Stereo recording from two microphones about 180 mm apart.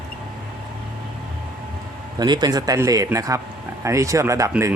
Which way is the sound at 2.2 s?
25° right (ahead or behind).